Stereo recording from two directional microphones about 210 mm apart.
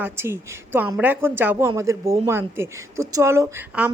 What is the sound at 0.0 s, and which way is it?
A woman's voice, 10° right (ahead or behind).